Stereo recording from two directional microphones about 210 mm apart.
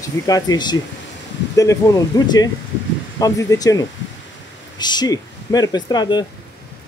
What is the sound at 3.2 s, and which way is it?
Speech, 15° left (ahead or behind).